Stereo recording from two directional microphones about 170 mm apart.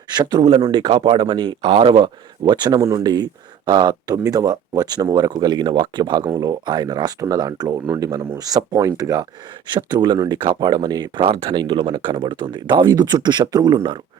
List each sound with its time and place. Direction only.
0.1 s speech: 25° right (ahead or behind)